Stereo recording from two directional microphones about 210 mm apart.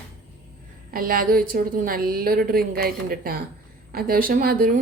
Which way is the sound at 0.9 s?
45° right (ahead or behind).